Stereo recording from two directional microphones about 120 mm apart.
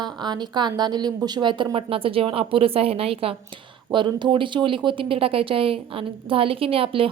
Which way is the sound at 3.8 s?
40° right (ahead or behind).